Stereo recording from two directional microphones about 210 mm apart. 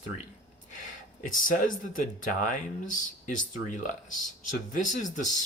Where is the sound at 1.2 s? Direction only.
40° left (ahead or behind).